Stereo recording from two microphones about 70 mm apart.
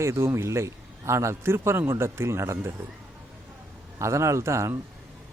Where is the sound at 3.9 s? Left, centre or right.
Right.